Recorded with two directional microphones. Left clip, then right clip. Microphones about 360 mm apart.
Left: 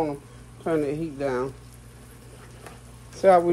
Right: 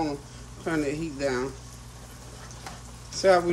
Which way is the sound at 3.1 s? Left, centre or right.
Centre.